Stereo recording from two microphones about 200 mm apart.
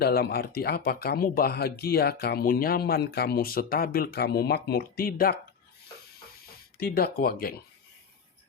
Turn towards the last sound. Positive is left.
turn(degrees=50)  # may be behind; listen again after turning